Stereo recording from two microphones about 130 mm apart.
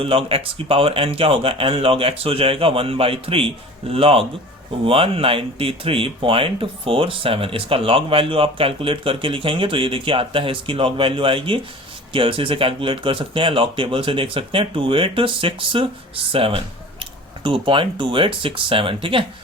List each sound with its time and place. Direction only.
0.0 s speech: 45° right (ahead or behind)